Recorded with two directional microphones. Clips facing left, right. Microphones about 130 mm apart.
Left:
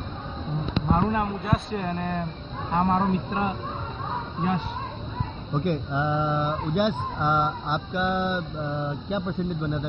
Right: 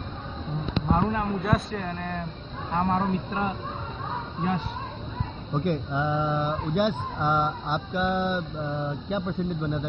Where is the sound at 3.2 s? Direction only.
5° left (ahead or behind).